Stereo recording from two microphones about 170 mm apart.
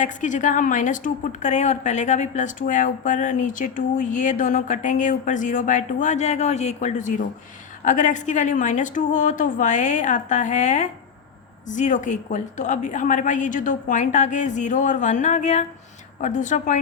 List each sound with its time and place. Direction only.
0.0 s a woman's voice: 45° left (ahead or behind)